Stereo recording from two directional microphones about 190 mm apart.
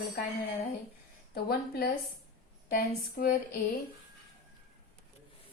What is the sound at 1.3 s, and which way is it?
Speech, 55° left (ahead or behind).